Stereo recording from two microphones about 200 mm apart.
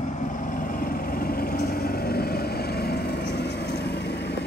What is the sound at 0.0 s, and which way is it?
Vehicle, 40° left (ahead or behind).